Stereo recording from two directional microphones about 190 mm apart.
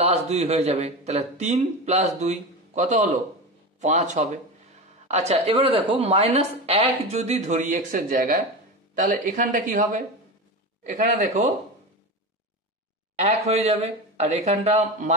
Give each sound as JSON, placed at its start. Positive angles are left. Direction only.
{"t": 0.0, "sound": "speech", "side_deg": -35}
{"t": 13.5, "sound": "speech", "side_deg": -35}